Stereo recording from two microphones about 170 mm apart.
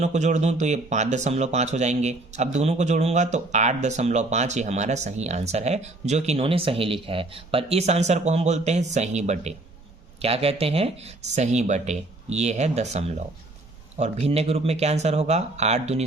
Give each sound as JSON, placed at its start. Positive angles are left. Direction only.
{"t": 0.0, "sound": "speech", "side_deg": -45}